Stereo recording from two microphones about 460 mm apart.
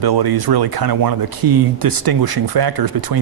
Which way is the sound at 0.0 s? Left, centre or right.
Right.